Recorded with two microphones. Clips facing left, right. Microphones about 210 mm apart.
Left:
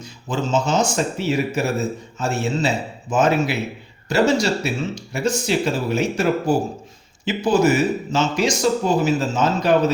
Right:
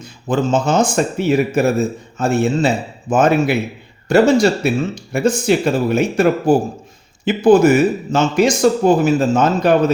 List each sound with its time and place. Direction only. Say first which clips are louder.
0.0 s speech: right 7 dB; 55° right (ahead or behind)